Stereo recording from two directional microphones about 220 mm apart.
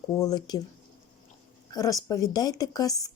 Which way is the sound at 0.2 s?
15° left (ahead or behind).